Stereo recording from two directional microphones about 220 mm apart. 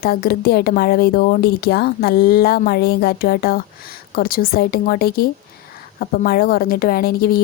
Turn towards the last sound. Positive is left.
turn(degrees=45)  # may be behind; listen again after turning